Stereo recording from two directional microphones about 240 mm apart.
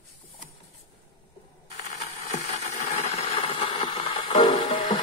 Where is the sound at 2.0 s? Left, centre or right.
Left.